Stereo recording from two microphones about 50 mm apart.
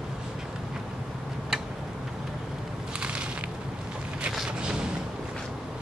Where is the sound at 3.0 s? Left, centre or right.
Right.